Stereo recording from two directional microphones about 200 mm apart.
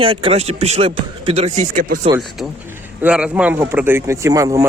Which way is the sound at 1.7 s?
40° right (ahead or behind).